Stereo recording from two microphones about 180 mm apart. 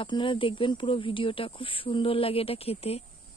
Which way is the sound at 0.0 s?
30° left (ahead or behind).